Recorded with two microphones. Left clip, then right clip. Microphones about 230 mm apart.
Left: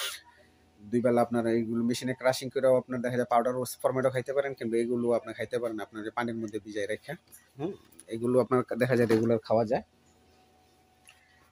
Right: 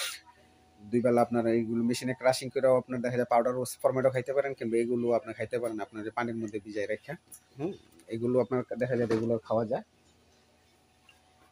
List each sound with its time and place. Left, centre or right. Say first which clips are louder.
0.8 s speech: even; centre
8.5 s speech: left 4 dB; left